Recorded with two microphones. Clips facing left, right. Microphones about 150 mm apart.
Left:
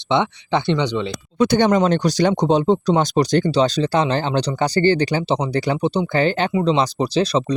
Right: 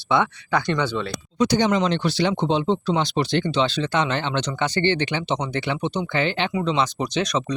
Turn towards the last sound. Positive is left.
turn(degrees=30)  # may be behind; listen again after turning